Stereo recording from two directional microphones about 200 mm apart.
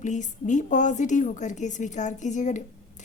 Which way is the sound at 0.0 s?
40° left (ahead or behind).